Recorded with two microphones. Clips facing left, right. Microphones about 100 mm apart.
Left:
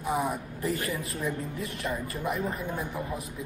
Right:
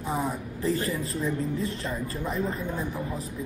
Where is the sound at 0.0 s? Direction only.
5° left (ahead or behind).